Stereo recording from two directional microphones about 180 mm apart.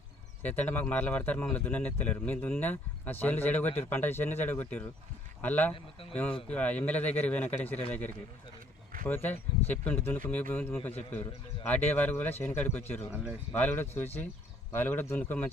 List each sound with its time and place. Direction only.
0.4 s speech: 10° left (ahead or behind)
5.7 s speech: 30° left (ahead or behind)
6.5 s speech: 10° left (ahead or behind)
9.0 s speech: 10° left (ahead or behind)